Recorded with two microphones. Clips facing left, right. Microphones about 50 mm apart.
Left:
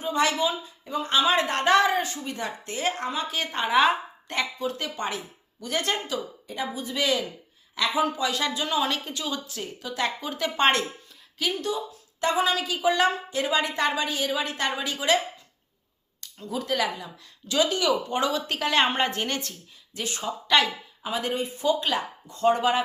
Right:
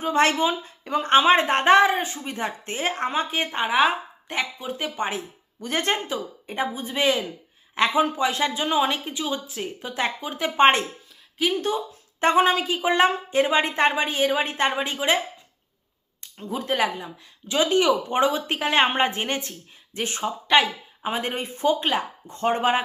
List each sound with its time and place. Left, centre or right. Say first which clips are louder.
0.0 s a woman's voice: right 4 dB; right
3.4 s a woman's voice: left 1 dB; right
11.5 s a woman's voice: right 4 dB; right
16.2 s a woman's voice: right 2 dB; right